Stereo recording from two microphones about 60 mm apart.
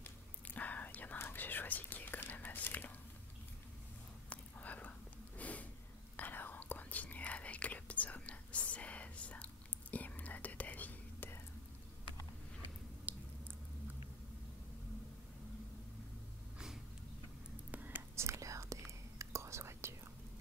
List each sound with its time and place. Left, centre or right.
0.5 s whispering: left
4.3 s whispering: left
5.4 s a sound: left
6.1 s whispering: left
13.1 s squish: right
17.6 s whispering: right
18.1 s whispering: right